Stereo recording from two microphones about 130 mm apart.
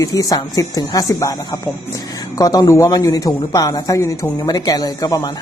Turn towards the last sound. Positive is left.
turn(degrees=30)  # may be behind; listen again after turning